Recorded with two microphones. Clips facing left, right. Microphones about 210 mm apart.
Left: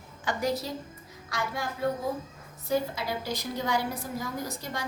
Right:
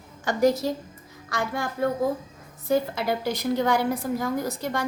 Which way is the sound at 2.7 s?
60° right (ahead or behind).